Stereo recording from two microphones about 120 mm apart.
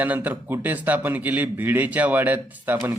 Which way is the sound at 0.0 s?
15° right (ahead or behind).